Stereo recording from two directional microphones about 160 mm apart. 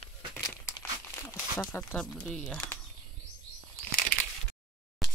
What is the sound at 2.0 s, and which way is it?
Speech, 5° left (ahead or behind).